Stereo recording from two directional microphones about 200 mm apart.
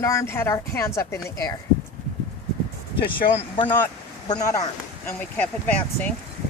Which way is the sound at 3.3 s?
25° left (ahead or behind).